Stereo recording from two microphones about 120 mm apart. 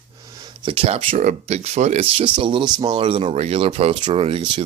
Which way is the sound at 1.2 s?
80° right.